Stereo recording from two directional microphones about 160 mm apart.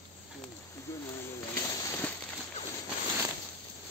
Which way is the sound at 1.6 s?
20° left (ahead or behind).